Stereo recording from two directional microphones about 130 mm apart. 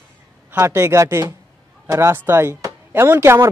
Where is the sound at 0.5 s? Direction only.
20° right (ahead or behind).